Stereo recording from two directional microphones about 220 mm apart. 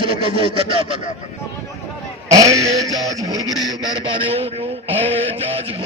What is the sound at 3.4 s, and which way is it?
Speech, 15° left (ahead or behind).